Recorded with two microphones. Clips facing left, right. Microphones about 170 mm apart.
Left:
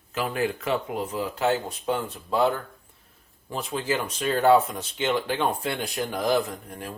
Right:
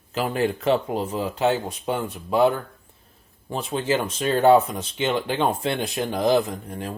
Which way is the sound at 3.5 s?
25° right (ahead or behind).